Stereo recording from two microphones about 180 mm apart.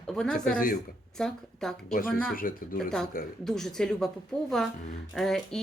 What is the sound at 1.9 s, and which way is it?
Speech, 50° left (ahead or behind).